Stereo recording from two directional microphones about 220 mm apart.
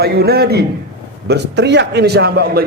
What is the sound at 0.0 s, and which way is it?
A man's voice, 45° right (ahead or behind).